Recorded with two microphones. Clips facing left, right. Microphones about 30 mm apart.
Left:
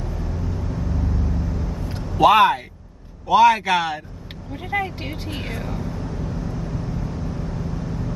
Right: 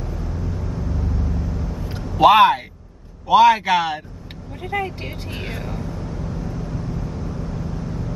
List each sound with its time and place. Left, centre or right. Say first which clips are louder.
0.0 s vehicle: even; centre
2.1 s a man's voice: right 2 dB; right
4.5 s speech: even; centre
5.5 s vehicle: even; centre